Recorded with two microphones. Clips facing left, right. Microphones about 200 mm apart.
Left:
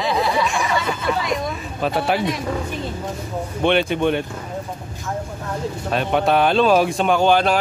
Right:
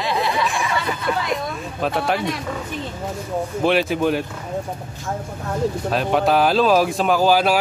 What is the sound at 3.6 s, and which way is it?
Speech, centre (ahead or behind).